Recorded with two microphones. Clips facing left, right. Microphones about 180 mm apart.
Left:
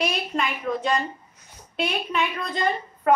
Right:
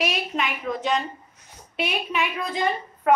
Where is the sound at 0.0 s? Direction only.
Centre (ahead or behind).